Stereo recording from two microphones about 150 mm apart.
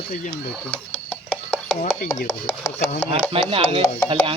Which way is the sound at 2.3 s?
20° left (ahead or behind).